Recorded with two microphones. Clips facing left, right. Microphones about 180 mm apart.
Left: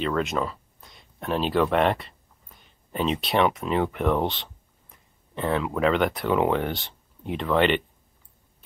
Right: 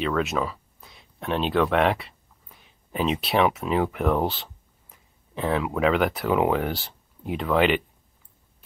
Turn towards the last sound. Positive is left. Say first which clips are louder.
# even
turn(degrees=-5)  # may be behind; listen again after turning